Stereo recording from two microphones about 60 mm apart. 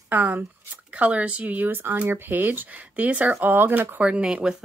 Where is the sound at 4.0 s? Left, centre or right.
Centre.